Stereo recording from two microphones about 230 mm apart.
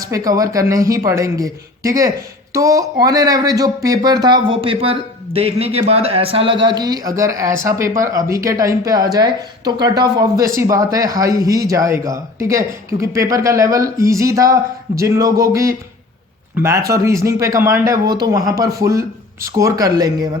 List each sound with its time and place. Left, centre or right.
0.0 s speech: centre